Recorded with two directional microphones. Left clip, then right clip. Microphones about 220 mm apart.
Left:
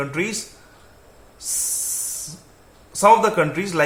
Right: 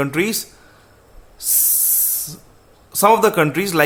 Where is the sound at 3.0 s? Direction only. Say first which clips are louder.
Right 1 dB; 50° right (ahead or behind).